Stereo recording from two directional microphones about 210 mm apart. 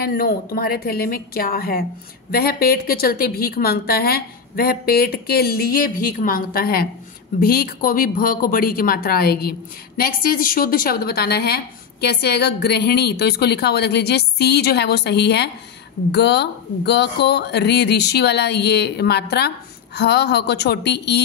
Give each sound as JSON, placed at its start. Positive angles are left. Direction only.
{"t": 0.0, "sound": "speech", "side_deg": 45}